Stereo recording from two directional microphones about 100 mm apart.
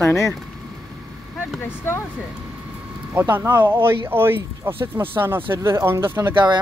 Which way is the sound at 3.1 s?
20° right (ahead or behind).